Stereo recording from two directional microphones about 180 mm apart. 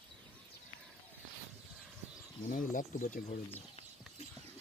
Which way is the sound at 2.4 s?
45° left (ahead or behind).